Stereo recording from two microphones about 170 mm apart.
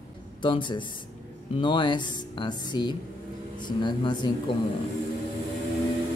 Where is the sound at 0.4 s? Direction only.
30° left (ahead or behind).